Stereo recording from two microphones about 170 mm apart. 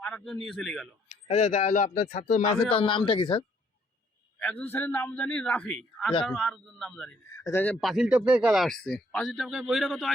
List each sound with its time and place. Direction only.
0.0 s speech: 5° left (ahead or behind)
1.0 s speech: 40° left (ahead or behind)
4.4 s a man's voice: 10° left (ahead or behind)